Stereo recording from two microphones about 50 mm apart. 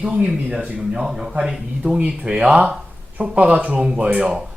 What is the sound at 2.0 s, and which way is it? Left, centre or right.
Speech, right.